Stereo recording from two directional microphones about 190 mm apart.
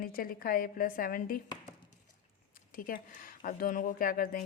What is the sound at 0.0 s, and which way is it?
Speech, 50° left (ahead or behind).